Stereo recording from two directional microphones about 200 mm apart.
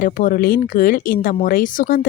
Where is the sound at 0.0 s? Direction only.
45° left (ahead or behind).